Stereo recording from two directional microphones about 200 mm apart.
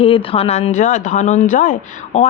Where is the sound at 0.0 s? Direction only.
25° left (ahead or behind).